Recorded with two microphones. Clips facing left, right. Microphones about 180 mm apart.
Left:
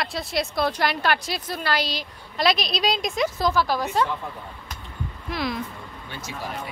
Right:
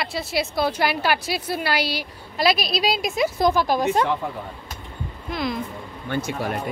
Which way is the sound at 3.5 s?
20° right (ahead or behind).